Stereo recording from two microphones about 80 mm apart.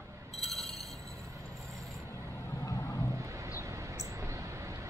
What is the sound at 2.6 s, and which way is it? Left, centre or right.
Vehicle, left.